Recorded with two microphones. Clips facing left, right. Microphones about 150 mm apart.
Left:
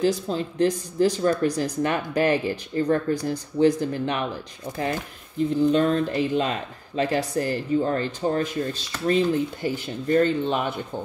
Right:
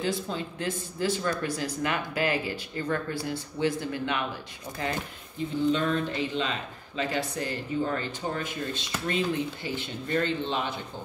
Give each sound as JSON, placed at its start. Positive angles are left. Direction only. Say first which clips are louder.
{"t": 0.3, "sound": "speech", "louder": "left 9 dB", "side_deg": 40}
{"t": 5.7, "sound": "speech", "louder": "left 6 dB", "side_deg": 40}